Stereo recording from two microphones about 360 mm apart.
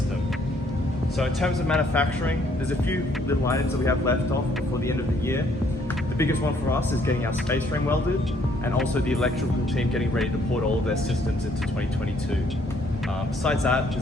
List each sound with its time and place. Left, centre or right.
1.2 s a man's voice: centre
6.1 s a man's voice: centre
13.4 s a man's voice: centre